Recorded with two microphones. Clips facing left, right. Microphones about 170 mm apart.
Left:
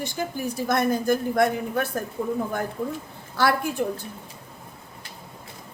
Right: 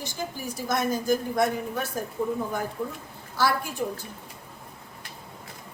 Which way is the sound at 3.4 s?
60° left (ahead or behind).